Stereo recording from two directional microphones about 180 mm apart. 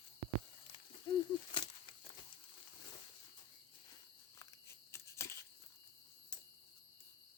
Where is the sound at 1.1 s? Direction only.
25° left (ahead or behind).